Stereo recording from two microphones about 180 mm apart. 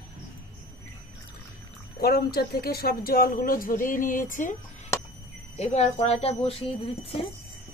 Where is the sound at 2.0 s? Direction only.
60° left (ahead or behind).